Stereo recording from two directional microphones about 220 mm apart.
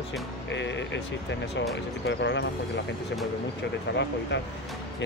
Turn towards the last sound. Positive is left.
turn(degrees=50)  # may be behind; listen again after turning